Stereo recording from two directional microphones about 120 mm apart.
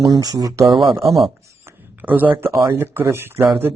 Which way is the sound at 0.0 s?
30° right (ahead or behind).